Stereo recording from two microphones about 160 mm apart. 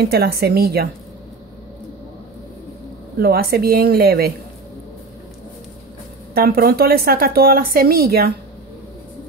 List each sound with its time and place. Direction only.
0.0 s a woman's voice: 80° right
3.2 s speech: 75° right (ahead or behind)
6.3 s speech: 70° right (ahead or behind)